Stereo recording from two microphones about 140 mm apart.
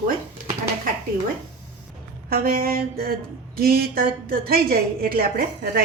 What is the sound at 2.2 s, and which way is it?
A woman's voice, 90° right.